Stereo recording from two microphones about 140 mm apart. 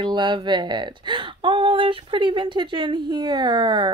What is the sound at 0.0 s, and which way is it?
A woman's voice, 35° right (ahead or behind).